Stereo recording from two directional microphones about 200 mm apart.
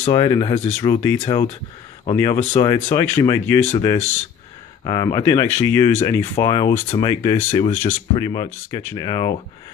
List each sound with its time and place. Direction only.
0.0 s speech: 20° left (ahead or behind)
0.8 s speech: 15° left (ahead or behind)